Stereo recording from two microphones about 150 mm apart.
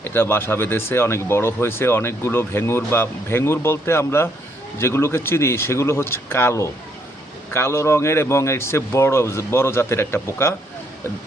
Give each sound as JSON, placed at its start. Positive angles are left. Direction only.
{"t": 0.0, "sound": "speech", "side_deg": 15}